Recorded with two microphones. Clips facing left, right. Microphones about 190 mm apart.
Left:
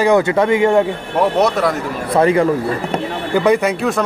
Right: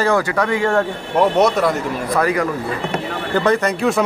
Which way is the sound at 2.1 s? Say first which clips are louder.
Left 6 dB; 25° left (ahead or behind).